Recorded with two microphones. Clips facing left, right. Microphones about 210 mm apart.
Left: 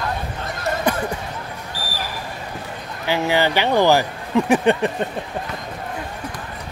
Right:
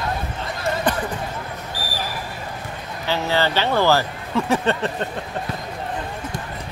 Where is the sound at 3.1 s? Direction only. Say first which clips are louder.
Left 2 dB; 15° left (ahead or behind).